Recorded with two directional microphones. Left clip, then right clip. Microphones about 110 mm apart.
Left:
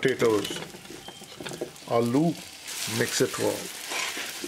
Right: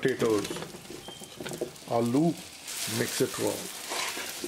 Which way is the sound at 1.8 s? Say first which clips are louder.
Left 3 dB; 45° left (ahead or behind).